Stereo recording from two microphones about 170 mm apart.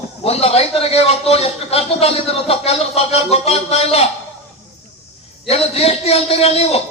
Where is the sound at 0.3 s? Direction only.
35° left (ahead or behind).